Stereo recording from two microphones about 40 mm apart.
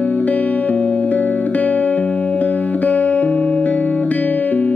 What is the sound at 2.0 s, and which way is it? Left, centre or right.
Music, left.